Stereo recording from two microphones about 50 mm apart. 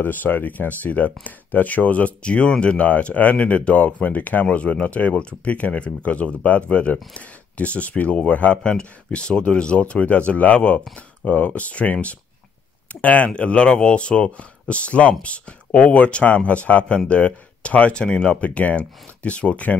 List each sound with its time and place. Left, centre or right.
0.0 s speech: left